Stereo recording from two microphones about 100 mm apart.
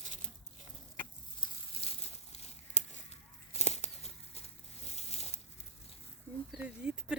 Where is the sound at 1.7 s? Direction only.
75° left (ahead or behind).